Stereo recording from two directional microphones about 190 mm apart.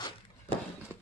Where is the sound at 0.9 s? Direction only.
10° right (ahead or behind).